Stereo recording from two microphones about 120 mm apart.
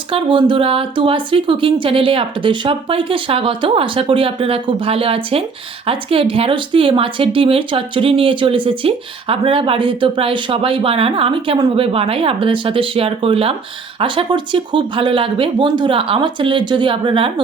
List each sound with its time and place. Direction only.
0.1 s speech: 45° right (ahead or behind)